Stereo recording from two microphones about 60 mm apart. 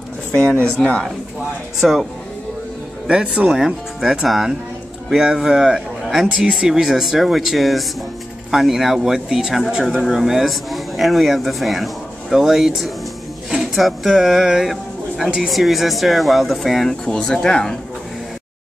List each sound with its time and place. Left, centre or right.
0.3 s speech: centre
1.8 s speech: centre
3.1 s a man's voice: centre
17.0 s speech: centre